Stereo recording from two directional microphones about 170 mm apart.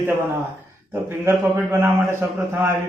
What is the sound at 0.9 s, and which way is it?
A man's voice, 15° right (ahead or behind).